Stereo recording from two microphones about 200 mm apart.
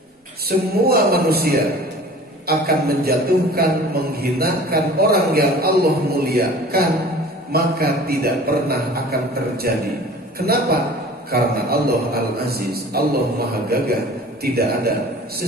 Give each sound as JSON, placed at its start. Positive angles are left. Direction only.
{"t": 0.5, "sound": "a man's voice", "side_deg": -50}